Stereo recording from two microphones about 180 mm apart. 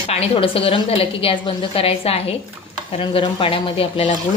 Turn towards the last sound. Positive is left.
turn(degrees=30)  # may be behind; listen again after turning